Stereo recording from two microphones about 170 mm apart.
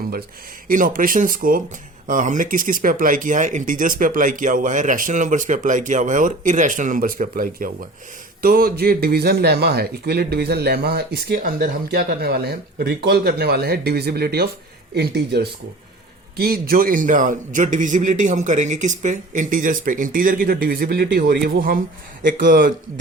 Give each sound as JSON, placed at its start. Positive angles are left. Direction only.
{"t": 0.7, "sound": "speech", "side_deg": -55}